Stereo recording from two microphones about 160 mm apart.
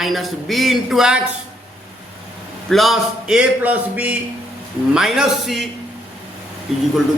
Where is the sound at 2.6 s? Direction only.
Centre (ahead or behind).